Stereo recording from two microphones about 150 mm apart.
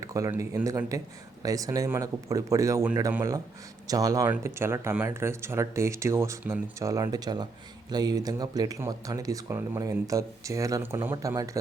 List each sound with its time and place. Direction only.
0.0 s speech: 20° right (ahead or behind)